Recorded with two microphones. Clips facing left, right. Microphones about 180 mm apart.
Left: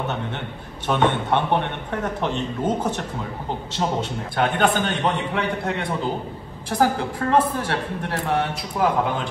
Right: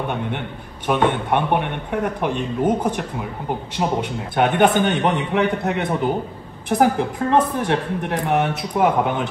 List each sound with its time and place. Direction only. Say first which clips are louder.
0.8 s a man's voice: right 2 dB; 10° right (ahead or behind)